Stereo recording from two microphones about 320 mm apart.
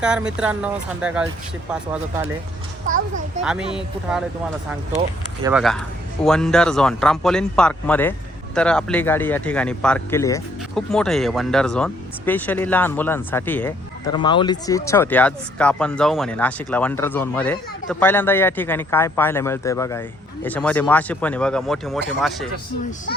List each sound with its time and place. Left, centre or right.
0.0 s speech: centre
2.8 s a child's voice: right
3.4 s speech: centre
4.9 s speech: centre